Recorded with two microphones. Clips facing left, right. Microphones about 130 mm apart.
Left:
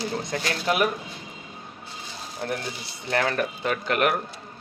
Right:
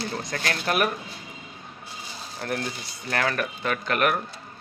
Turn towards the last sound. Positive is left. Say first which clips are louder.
# left 1 dB
turn(degrees=25)  # may be behind; listen again after turning